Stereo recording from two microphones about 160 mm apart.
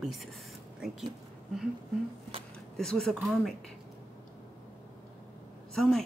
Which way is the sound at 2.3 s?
35° right (ahead or behind).